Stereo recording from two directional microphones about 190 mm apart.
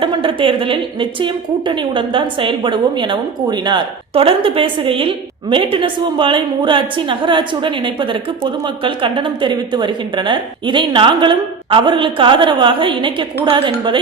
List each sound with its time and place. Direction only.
0.0 s a woman's voice: 25° right (ahead or behind)